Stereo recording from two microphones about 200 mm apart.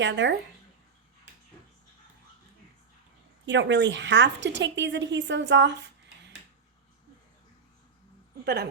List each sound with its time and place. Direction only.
0.0 s a woman's voice: 60° right (ahead or behind)
3.4 s a woman's voice: 65° right (ahead or behind)